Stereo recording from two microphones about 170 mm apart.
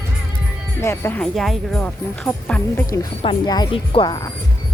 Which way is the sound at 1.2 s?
Centre (ahead or behind).